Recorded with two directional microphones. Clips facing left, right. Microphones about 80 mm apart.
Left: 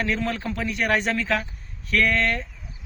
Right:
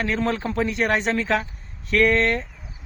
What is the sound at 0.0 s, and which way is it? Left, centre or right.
A man's voice, right.